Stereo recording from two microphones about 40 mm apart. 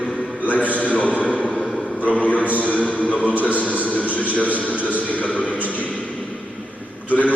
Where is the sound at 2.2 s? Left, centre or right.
Left.